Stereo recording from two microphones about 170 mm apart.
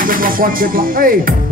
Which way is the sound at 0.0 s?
55° right (ahead or behind).